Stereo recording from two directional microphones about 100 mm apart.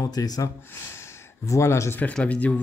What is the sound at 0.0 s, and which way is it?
Speech, 40° left (ahead or behind).